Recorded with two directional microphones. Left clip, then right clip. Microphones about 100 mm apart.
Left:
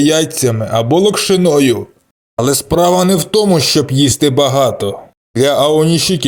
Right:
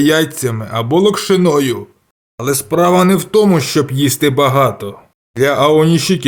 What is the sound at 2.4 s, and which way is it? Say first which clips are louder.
Speech: left 2 dB; 55° left (ahead or behind).